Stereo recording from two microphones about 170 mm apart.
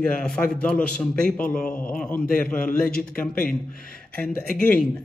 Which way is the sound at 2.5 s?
55° left (ahead or behind).